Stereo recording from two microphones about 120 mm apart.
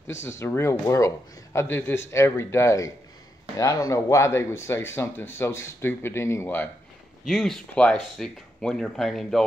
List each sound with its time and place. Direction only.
0.3 s speech: 25° left (ahead or behind)
7.2 s speech: centre (ahead or behind)